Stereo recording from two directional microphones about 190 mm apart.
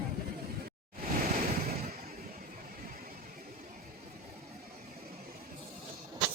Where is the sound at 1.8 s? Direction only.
50° right (ahead or behind).